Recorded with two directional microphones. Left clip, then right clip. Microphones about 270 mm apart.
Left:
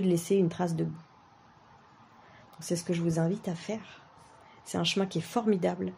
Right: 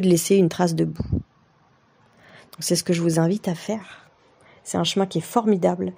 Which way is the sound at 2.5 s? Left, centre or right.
Right.